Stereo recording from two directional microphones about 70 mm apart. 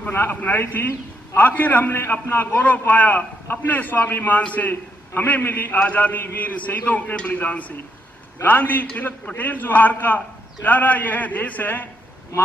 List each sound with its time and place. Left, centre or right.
0.0 s a man's voice: left